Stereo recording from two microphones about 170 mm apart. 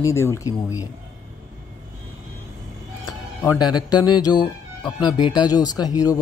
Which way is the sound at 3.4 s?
20° left (ahead or behind).